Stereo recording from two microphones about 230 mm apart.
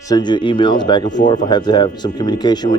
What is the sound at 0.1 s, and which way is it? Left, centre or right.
A man's voice, centre.